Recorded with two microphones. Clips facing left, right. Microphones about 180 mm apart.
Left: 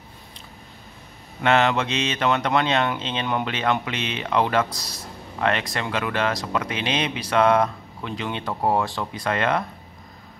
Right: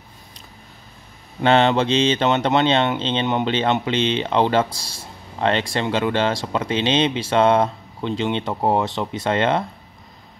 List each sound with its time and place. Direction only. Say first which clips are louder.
1.4 s speech: right 4 dB; 30° right (ahead or behind)